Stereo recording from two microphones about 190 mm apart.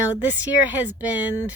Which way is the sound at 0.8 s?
10° right (ahead or behind).